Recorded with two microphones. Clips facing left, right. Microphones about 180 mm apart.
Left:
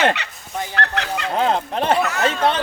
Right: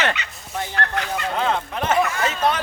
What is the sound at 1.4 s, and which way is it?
Speech, 35° left (ahead or behind).